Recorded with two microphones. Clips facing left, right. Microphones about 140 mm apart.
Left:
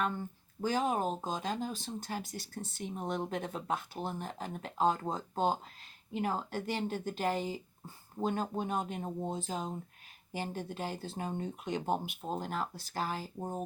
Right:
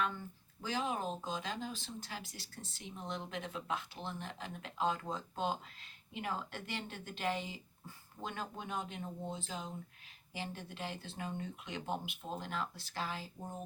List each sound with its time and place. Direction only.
0.6 s speech: 45° left (ahead or behind)